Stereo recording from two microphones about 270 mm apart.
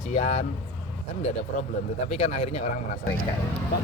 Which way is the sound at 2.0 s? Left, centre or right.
Left.